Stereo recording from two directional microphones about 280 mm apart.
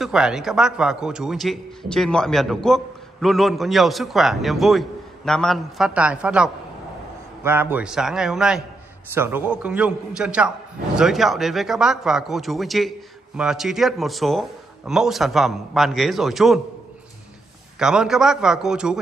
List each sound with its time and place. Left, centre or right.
0.0 s a man's voice: centre
17.7 s a man's voice: centre